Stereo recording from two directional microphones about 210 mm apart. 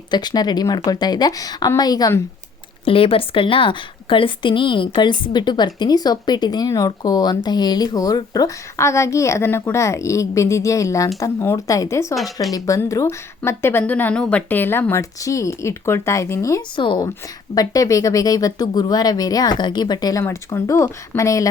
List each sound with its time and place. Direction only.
0.1 s a woman's voice: 20° left (ahead or behind)
12.1 s speech: centre (ahead or behind)
12.5 s speech: 15° left (ahead or behind)